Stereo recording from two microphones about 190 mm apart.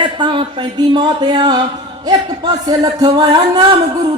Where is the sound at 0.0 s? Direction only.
25° right (ahead or behind).